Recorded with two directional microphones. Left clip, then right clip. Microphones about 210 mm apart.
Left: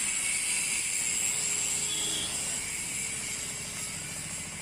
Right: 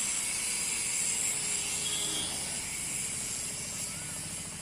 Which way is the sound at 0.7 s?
40° left (ahead or behind).